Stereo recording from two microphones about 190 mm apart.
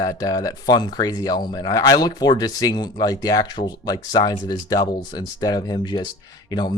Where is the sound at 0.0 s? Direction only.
20° left (ahead or behind).